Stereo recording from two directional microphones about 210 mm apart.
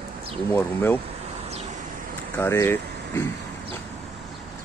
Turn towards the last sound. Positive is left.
turn(degrees=15)  # may be behind; listen again after turning